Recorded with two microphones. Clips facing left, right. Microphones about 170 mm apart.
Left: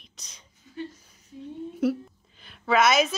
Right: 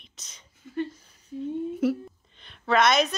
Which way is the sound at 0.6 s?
55° right (ahead or behind).